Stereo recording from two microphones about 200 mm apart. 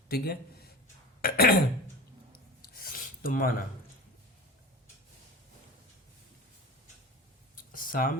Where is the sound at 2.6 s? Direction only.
45° left (ahead or behind).